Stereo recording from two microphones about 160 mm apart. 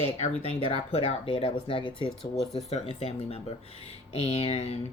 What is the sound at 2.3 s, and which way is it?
Speech, centre (ahead or behind).